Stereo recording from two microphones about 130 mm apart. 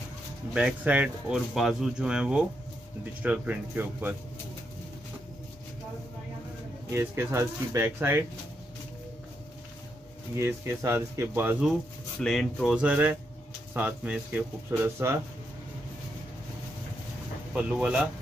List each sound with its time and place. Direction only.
0.5 s speech: 5° right (ahead or behind)
6.9 s speech: 20° right (ahead or behind)
10.3 s speech: 20° right (ahead or behind)
12.2 s speech: 5° left (ahead or behind)
12.8 s speech: 15° right (ahead or behind)
17.6 s speech: 10° right (ahead or behind)